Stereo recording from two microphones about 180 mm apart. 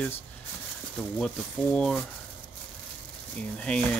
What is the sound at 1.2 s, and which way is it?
Speech, 5° left (ahead or behind).